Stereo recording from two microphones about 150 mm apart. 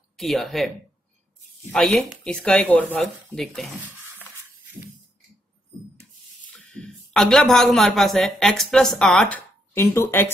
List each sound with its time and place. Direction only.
0.2 s speech: centre (ahead or behind)
1.7 s speech: centre (ahead or behind)
6.7 s speech: 5° left (ahead or behind)
9.8 s speech: 15° left (ahead or behind)